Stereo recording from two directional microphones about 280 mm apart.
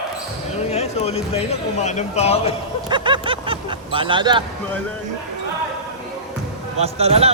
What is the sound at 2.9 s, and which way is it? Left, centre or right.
Speech, centre.